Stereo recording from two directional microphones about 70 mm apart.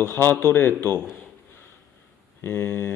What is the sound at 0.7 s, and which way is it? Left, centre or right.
Speech, right.